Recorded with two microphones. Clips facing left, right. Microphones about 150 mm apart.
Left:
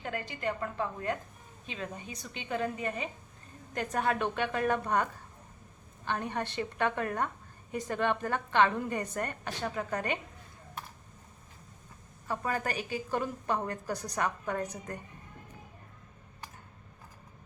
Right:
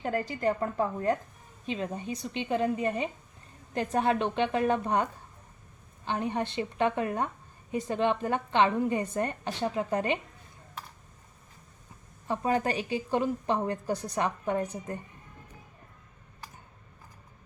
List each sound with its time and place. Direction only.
0.0 s a woman's voice: 35° right (ahead or behind)
6.1 s a woman's voice: 20° right (ahead or behind)
12.3 s a woman's voice: 25° right (ahead or behind)